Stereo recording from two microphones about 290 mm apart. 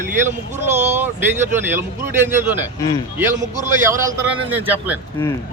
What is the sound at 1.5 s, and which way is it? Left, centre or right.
Speech, centre.